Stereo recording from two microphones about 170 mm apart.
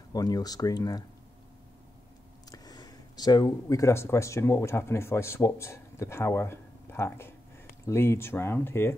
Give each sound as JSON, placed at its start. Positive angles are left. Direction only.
{"t": 0.1, "sound": "speech", "side_deg": 20}
{"t": 2.5, "sound": "speech", "side_deg": 25}